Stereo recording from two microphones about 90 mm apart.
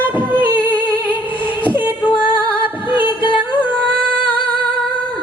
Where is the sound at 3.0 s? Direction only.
65° left (ahead or behind).